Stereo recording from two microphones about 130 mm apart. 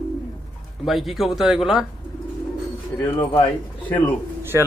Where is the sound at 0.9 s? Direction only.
Centre (ahead or behind).